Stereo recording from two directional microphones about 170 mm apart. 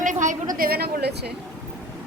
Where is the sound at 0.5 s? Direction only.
60° right (ahead or behind).